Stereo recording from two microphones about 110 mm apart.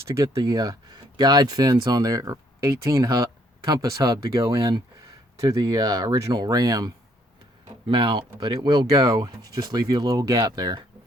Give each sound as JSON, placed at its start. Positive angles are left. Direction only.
{"t": 0.0, "sound": "speech", "side_deg": -25}
{"t": 7.9, "sound": "speech", "side_deg": -45}